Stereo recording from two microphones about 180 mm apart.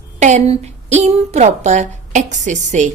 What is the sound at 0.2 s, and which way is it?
A woman's voice, 40° right (ahead or behind).